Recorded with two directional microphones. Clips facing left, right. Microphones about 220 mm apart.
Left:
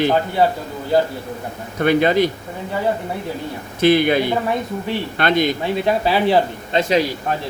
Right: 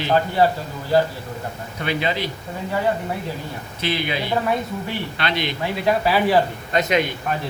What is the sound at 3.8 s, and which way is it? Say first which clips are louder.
A man's voice: left 10 dB; 50° left (ahead or behind).